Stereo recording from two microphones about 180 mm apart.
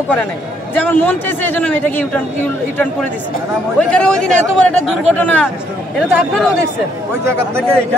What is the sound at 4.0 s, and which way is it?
Speech, 5° left (ahead or behind).